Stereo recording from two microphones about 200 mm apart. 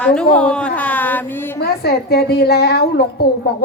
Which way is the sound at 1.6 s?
50° left (ahead or behind).